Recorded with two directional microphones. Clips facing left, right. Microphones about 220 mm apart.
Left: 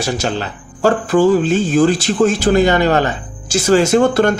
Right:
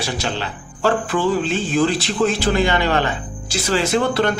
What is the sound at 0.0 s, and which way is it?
Speech, 45° left (ahead or behind).